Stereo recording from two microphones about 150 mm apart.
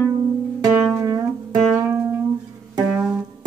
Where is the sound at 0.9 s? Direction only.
25° right (ahead or behind).